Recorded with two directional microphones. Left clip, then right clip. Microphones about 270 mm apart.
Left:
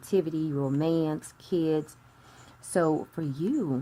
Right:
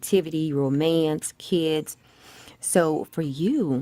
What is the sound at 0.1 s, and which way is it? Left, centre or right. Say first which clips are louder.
A woman's voice: right 4 dB; right.